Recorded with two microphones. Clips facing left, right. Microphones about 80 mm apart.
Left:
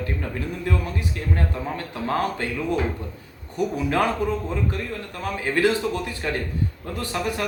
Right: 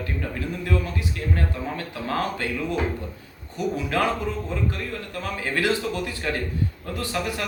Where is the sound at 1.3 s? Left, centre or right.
Left.